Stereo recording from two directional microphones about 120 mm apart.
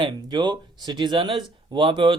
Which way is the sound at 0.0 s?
40° right (ahead or behind).